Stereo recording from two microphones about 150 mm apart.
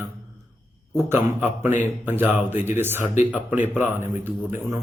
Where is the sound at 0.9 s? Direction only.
15° right (ahead or behind).